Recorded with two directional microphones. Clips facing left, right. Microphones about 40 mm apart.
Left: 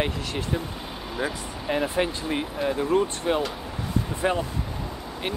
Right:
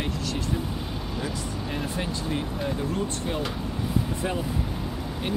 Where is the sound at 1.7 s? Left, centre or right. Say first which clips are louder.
Left 8 dB; left.